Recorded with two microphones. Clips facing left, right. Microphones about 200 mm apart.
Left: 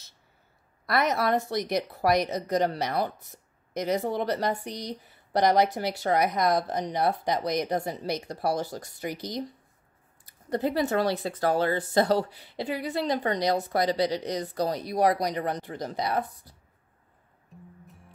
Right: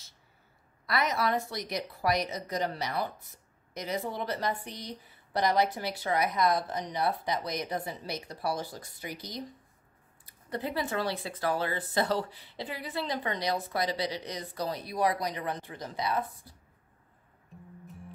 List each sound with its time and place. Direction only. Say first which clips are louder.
0.8 s a woman's voice: left 4 dB; 55° left (ahead or behind)
17.5 s music: left 1 dB; centre (ahead or behind)